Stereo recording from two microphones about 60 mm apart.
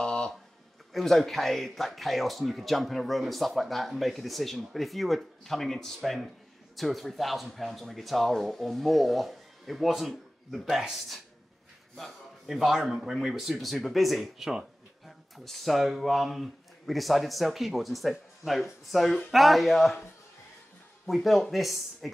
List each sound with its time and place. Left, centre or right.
0.0 s a sound: centre
0.9 s speech: centre
21.1 s speech: centre